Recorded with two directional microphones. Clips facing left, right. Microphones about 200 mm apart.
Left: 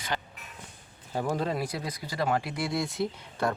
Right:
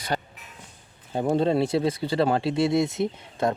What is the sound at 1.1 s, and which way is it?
Speech, 25° right (ahead or behind).